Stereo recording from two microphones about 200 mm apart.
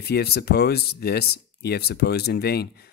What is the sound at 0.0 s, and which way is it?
Speech, 55° left (ahead or behind).